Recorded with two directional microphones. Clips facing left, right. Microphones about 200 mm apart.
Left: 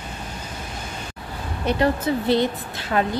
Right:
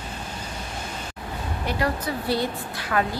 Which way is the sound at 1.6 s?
25° left (ahead or behind).